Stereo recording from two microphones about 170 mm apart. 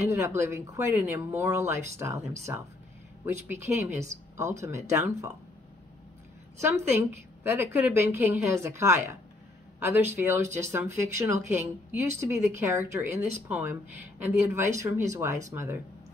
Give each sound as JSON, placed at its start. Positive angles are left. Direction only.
{"t": 0.0, "sound": "speech", "side_deg": -15}
{"t": 6.6, "sound": "speech", "side_deg": -15}